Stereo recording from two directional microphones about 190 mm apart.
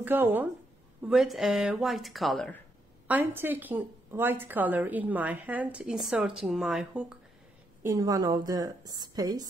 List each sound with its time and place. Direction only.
0.0 s a woman's voice: 10° right (ahead or behind)
3.1 s a woman's voice: 10° right (ahead or behind)
7.8 s a woman's voice: 20° right (ahead or behind)